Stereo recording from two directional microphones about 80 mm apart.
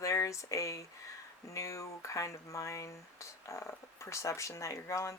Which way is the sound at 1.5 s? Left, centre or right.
Left.